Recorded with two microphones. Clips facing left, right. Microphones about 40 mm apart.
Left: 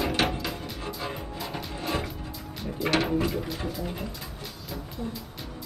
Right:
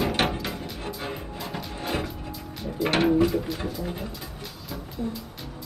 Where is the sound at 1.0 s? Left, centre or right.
Right.